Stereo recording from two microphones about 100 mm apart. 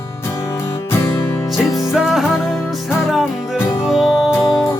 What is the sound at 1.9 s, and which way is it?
Music, 5° right (ahead or behind).